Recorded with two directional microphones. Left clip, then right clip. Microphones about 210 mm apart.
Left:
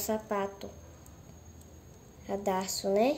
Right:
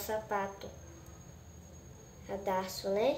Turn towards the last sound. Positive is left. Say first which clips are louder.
# left 4 dB
turn(degrees=45)  # may be behind; listen again after turning